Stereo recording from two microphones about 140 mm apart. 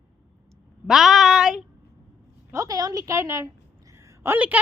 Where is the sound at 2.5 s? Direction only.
25° right (ahead or behind).